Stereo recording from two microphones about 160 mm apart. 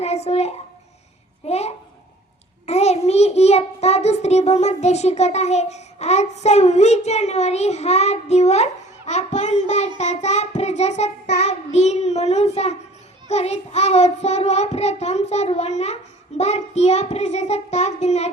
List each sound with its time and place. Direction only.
0.0 s a child's voice: 40° left (ahead or behind)
2.6 s child singing: 45° left (ahead or behind)